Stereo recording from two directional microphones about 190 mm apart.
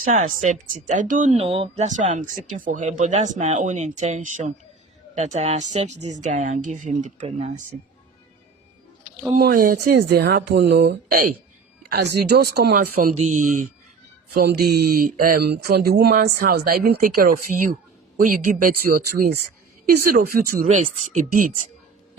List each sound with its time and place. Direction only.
0.0 s speech: 40° right (ahead or behind)
9.4 s a woman's voice: 50° right (ahead or behind)
14.3 s speech: 55° right (ahead or behind)
20.7 s speech: 35° right (ahead or behind)